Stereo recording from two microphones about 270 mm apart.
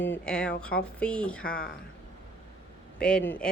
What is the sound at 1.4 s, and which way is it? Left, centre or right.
Speech, left.